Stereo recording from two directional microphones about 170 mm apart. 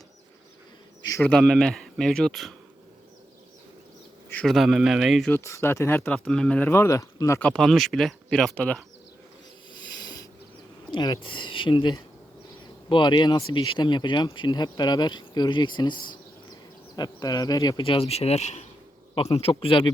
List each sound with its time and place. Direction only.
1.0 s insect: 20° left (ahead or behind)
1.3 s speech: 5° left (ahead or behind)
4.3 s speech: 5° left (ahead or behind)
5.3 s speech: 15° left (ahead or behind)
10.0 s a sound: 25° left (ahead or behind)
10.9 s a man's voice: 25° left (ahead or behind)